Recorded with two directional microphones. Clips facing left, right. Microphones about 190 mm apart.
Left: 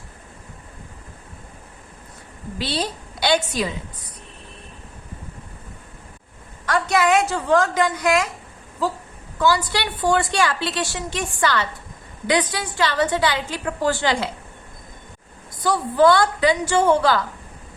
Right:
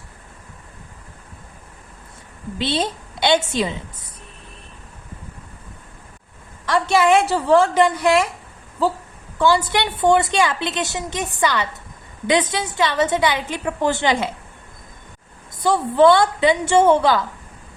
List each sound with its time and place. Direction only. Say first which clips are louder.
2.6 s a woman's voice: right 3 dB; 25° right (ahead or behind)
6.7 s a woman's voice: right 3 dB; 30° right (ahead or behind)
9.4 s a woman's voice: right 3 dB; 25° right (ahead or behind)
15.6 s a woman's voice: right 2 dB; 25° right (ahead or behind)